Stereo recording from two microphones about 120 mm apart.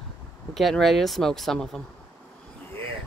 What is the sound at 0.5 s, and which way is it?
Speech, centre (ahead or behind).